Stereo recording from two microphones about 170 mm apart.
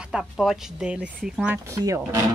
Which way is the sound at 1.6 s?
20° right (ahead or behind).